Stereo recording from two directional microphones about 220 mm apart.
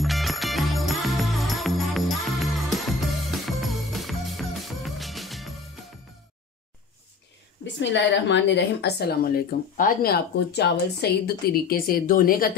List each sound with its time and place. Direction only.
0.0 s music: centre (ahead or behind)
7.6 s a woman's voice: 55° left (ahead or behind)